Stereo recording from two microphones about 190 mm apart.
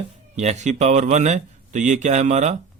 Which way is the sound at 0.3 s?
35° right (ahead or behind).